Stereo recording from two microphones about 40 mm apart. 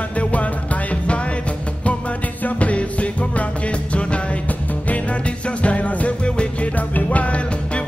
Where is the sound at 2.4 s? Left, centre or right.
Left.